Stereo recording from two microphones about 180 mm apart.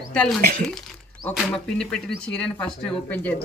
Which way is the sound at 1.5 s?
5° left (ahead or behind).